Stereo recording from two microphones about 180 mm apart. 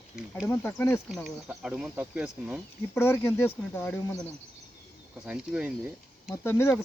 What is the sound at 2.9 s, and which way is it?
Speech, 15° left (ahead or behind).